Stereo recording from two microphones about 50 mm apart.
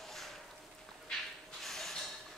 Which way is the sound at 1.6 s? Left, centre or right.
Centre.